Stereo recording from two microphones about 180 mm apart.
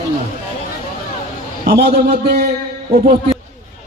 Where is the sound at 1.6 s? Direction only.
60° right (ahead or behind).